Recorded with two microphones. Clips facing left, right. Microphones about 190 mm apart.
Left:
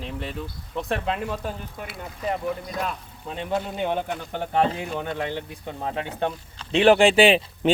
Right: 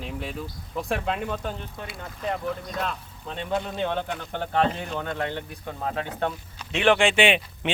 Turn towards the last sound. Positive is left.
turn(degrees=35)  # may be behind; listen again after turning